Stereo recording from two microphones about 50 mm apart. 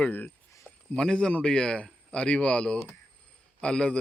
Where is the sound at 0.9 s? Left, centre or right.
Centre.